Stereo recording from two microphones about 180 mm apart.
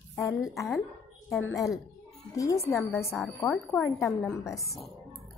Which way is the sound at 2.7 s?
15° left (ahead or behind).